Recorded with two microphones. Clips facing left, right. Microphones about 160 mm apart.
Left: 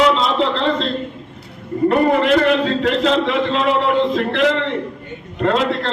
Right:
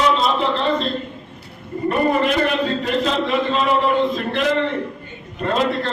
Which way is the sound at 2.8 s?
90° left.